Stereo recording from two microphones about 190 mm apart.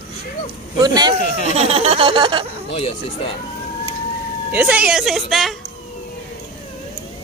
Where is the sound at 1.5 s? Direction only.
35° right (ahead or behind).